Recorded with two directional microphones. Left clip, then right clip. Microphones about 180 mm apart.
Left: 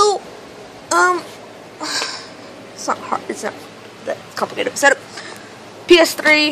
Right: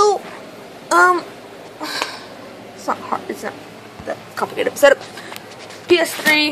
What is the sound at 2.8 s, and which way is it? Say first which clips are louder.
A woman's voice: left 1 dB; 10° left (ahead or behind).